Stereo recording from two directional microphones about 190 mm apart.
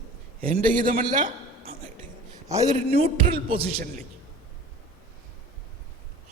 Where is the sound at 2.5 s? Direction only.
15° right (ahead or behind).